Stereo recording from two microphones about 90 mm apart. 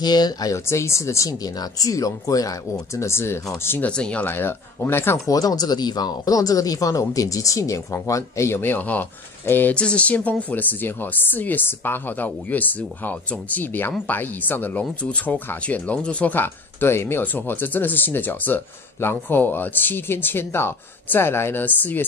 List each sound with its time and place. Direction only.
0.0 s speech: 50° left (ahead or behind)
0.7 s speech: 30° left (ahead or behind)
3.9 s speech: 10° left (ahead or behind)
4.3 s speech: 25° left (ahead or behind)
5.3 s speech: 40° left (ahead or behind); by 22.0 s 20° left (ahead or behind)